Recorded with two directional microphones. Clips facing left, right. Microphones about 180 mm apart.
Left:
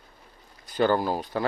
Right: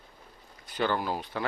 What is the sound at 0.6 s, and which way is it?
Speech, 40° left (ahead or behind).